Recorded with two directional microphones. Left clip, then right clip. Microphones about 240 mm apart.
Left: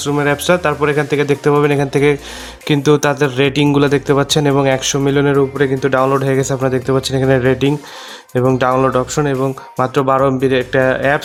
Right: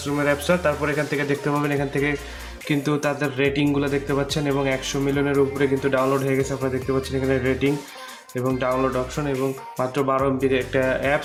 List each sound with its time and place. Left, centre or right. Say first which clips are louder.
0.0 s speech: left 7 dB; left